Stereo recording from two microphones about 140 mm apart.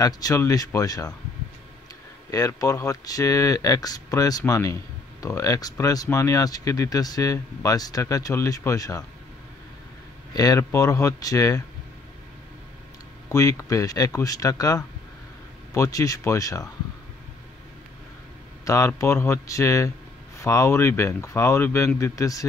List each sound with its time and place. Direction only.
0.0 s speech: 25° left (ahead or behind)
2.3 s speech: 25° left (ahead or behind)
10.3 s speech: 25° left (ahead or behind)
13.3 s speech: 25° left (ahead or behind)
18.7 s speech: 20° left (ahead or behind)